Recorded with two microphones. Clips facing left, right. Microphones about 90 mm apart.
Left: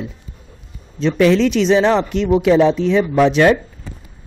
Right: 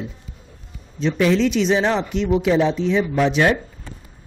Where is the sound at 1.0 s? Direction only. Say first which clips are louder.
Left 4 dB; 80° left.